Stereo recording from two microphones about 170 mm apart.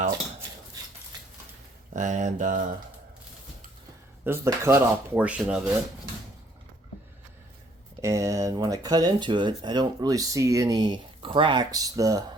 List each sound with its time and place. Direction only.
1.9 s speech: 45° right (ahead or behind)
4.2 s speech: 15° right (ahead or behind)
8.0 s speech: 15° right (ahead or behind)